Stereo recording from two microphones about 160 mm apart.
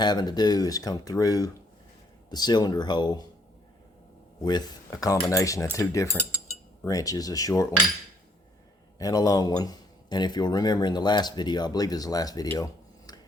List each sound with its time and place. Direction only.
0.0 s a man's voice: 25° left (ahead or behind)
4.4 s a man's voice: 25° left (ahead or behind)
9.0 s a man's voice: 20° left (ahead or behind)